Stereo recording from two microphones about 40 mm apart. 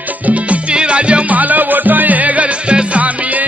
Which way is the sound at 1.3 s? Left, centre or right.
Right.